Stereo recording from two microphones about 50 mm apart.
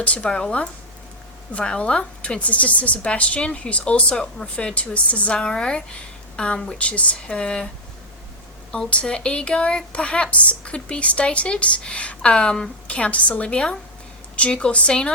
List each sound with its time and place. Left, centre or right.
0.0 s a woman's voice: left
6.7 s a woman's voice: left
8.9 s a woman's voice: left
12.9 s a woman's voice: left